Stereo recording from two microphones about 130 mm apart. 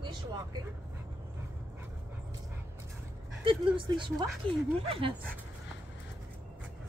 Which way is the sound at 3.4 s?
40° right (ahead or behind).